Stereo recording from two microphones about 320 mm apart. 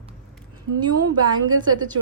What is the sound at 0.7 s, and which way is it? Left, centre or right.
Speech, right.